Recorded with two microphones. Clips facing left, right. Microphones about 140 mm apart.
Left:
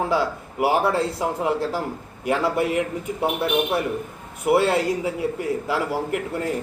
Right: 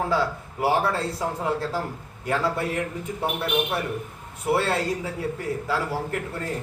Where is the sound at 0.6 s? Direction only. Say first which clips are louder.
Left 3 dB; 15° left (ahead or behind).